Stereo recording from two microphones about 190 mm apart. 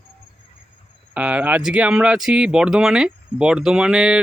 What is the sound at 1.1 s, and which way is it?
Speech, 5° right (ahead or behind).